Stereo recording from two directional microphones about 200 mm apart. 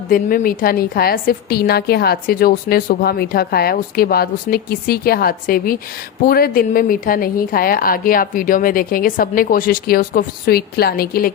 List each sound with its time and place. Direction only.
0.1 s a woman's voice: 45° left (ahead or behind)